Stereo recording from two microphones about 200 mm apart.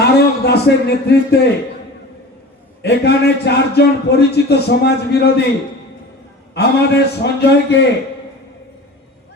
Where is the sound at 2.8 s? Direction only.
55° left (ahead or behind).